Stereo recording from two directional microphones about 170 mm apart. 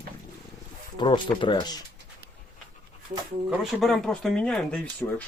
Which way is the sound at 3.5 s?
Centre (ahead or behind).